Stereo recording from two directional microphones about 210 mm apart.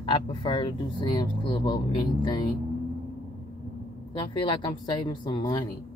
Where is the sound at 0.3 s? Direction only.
25° left (ahead or behind).